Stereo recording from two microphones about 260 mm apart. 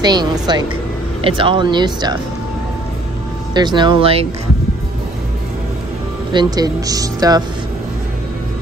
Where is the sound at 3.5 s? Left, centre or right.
Centre.